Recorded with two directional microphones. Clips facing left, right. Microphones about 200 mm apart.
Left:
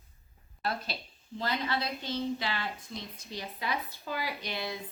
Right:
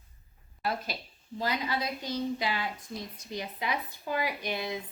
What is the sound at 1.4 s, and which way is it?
A woman's voice, 15° right (ahead or behind).